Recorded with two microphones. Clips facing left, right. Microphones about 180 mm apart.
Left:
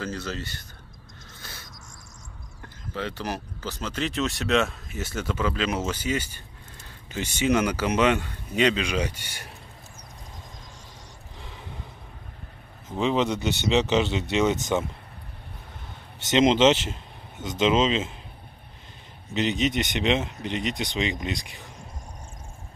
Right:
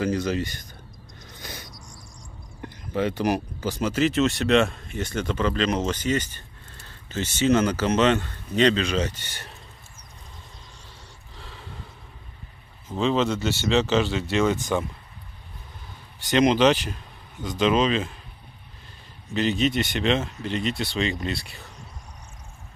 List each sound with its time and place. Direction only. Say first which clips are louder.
0.0 s speech: right 8 dB; 15° right (ahead or behind)
1.4 s a sound: right 6 dB; 15° right (ahead or behind)
2.6 s a man's voice: right 7 dB; 15° right (ahead or behind); by 9.5 s 10° left (ahead or behind)
11.3 s gasp: even; 20° left (ahead or behind)
12.8 s a man's voice: right 1 dB; 15° left (ahead or behind)
16.2 s speech: even; 20° left (ahead or behind)
19.3 s a man's voice: right 2 dB; 20° left (ahead or behind)